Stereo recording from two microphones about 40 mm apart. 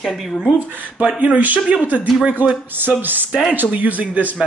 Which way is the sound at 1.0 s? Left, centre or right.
Right.